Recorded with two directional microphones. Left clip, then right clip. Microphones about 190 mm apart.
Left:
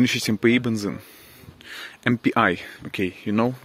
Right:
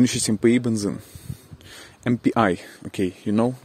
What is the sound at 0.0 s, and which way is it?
Speech, 20° right (ahead or behind).